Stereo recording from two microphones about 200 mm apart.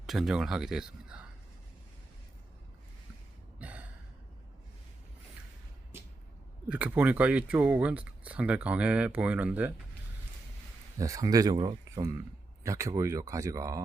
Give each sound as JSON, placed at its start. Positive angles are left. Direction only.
{"t": 0.0, "sound": "speech", "side_deg": 0}
{"t": 3.6, "sound": "gasp", "side_deg": -5}
{"t": 6.7, "sound": "speech", "side_deg": -5}
{"t": 10.9, "sound": "speech", "side_deg": -15}